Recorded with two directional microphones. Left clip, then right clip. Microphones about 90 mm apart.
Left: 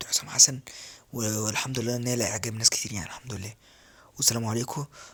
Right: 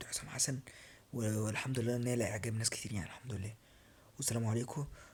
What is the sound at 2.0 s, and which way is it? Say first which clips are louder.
Speech: left 8 dB; 30° left (ahead or behind).